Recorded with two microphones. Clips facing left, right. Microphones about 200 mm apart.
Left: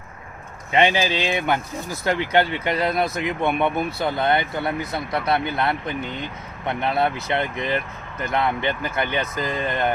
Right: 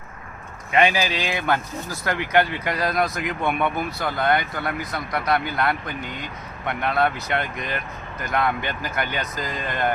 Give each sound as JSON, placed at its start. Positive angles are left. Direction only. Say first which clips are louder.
{"t": 0.7, "sound": "speech", "louder": "left 1 dB", "side_deg": 25}